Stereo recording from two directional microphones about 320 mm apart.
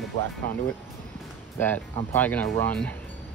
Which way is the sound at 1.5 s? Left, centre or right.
Centre.